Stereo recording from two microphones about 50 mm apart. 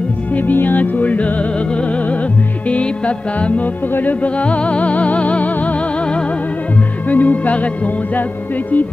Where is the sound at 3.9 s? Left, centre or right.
Left.